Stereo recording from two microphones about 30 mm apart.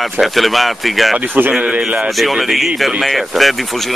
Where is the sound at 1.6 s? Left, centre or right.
Right.